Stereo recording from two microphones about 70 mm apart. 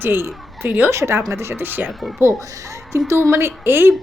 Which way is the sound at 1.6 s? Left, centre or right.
Right.